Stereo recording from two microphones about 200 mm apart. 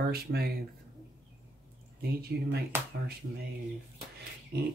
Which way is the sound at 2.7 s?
10° right (ahead or behind).